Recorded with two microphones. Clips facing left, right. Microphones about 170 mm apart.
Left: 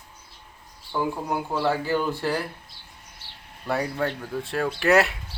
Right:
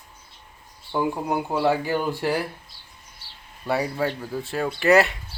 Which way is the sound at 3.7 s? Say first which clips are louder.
Right 2 dB; 5° right (ahead or behind).